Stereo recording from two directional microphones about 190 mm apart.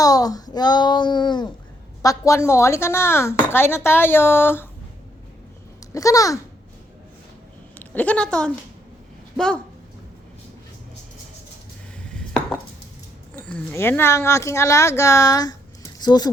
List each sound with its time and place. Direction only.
0.0 s speech: 20° left (ahead or behind)
5.9 s speech: 15° left (ahead or behind)
7.8 s a woman's voice: 10° left (ahead or behind)
12.0 s chopping: 5° left (ahead or behind)
13.4 s speech: 5° left (ahead or behind)